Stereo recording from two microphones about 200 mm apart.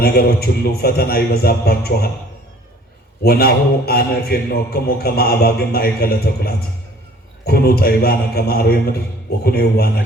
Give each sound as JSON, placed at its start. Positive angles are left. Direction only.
{"t": 0.0, "sound": "a man's voice", "side_deg": 50}
{"t": 3.2, "sound": "a man's voice", "side_deg": 50}